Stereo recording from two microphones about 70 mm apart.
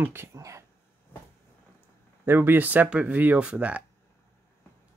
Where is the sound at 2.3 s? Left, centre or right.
Right.